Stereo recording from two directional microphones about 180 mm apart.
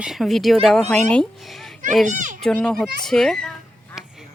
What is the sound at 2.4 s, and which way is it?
Speech, 5° left (ahead or behind).